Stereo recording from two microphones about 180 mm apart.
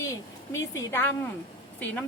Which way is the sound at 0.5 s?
15° left (ahead or behind).